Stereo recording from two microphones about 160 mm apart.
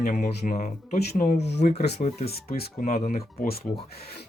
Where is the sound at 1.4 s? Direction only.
90° left.